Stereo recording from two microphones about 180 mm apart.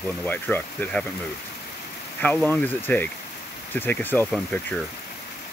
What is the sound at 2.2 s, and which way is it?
Speech, 10° left (ahead or behind).